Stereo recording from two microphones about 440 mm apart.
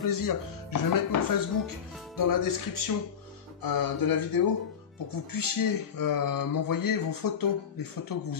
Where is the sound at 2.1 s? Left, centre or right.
Left.